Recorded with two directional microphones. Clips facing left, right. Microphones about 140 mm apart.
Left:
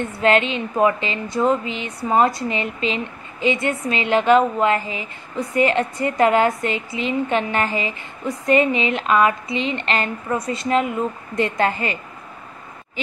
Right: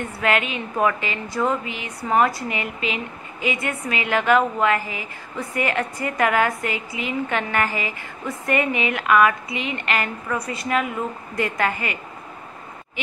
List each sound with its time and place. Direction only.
0.0 s a woman's voice: 25° left (ahead or behind)